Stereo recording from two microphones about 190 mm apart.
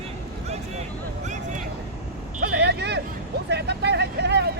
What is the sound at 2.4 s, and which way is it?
Vehicle, 60° right (ahead or behind).